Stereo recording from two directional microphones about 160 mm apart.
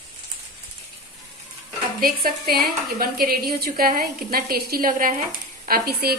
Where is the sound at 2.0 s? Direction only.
70° right (ahead or behind).